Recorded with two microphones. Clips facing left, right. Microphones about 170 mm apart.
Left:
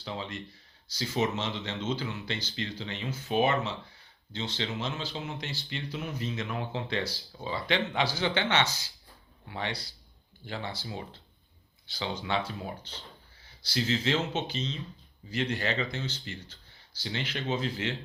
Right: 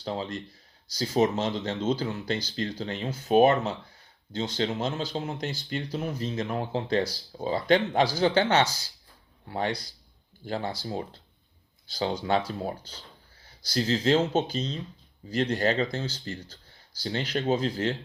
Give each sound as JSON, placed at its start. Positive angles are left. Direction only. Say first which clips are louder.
{"t": 0.0, "sound": "speech", "louder": "right 5 dB", "side_deg": -40}